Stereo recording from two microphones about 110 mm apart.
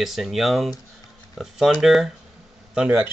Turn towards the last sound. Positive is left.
turn(degrees=-10)  # may be behind; listen again after turning